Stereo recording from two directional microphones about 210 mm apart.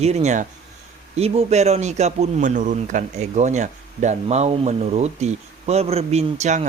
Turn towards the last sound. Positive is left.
turn(degrees=-30)  # may be behind; listen again after turning